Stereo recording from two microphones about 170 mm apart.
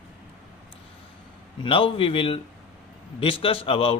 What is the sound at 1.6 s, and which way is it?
Speech, 30° left (ahead or behind).